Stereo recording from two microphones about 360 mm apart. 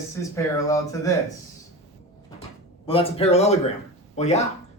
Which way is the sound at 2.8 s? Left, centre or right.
Centre.